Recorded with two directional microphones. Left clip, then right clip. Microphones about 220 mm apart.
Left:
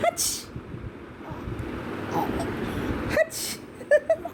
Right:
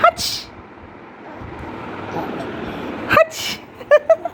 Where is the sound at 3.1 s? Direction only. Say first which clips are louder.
Right 11 dB; 15° right (ahead or behind).